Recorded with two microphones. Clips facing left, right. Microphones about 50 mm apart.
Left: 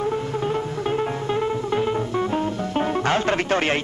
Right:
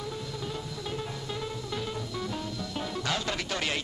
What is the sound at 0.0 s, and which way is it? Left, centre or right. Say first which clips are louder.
Music: left 13 dB; left.